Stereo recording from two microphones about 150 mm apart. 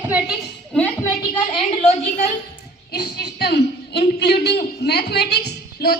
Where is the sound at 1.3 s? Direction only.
35° left (ahead or behind).